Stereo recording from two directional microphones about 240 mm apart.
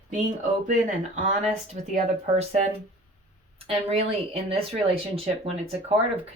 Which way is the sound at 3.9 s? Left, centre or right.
Right.